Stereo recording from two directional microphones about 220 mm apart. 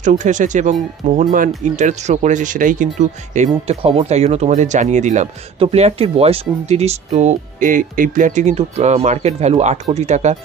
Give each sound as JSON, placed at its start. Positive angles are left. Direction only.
{"t": 0.0, "sound": "speech", "side_deg": -35}